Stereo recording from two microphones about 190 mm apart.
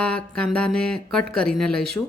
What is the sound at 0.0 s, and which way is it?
Speech, 5° left (ahead or behind).